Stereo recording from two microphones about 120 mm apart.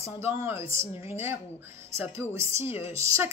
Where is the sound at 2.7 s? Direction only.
55° left (ahead or behind).